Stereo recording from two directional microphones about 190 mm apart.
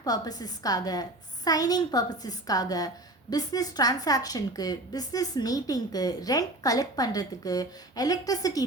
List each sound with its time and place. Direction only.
0.0 s a woman's voice: 20° left (ahead or behind)